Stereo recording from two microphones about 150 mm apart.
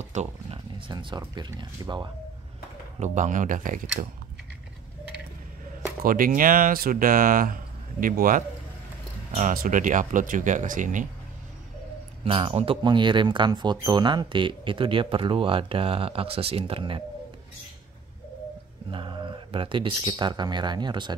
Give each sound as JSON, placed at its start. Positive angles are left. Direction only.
{"t": 0.0, "sound": "a sound", "side_deg": -50}
{"t": 0.7, "sound": "speech", "side_deg": -30}
{"t": 3.0, "sound": "speech", "side_deg": -55}
{"t": 6.0, "sound": "speech", "side_deg": -65}
{"t": 12.3, "sound": "speech", "side_deg": -40}
{"t": 18.9, "sound": "speech", "side_deg": -35}